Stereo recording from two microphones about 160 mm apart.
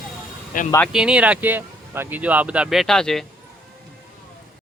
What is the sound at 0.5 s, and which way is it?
Speech, 60° left (ahead or behind).